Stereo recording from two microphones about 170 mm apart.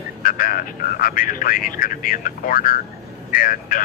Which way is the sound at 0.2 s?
55° left (ahead or behind).